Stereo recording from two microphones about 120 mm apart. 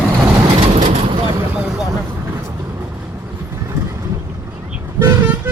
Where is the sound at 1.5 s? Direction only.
5° right (ahead or behind).